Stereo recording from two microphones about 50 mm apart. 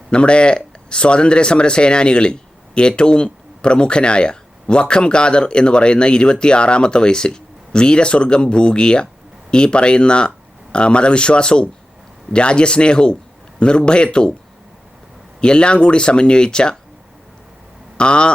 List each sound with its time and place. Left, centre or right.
0.1 s speech: left
15.4 s speech: centre
17.9 s speech: centre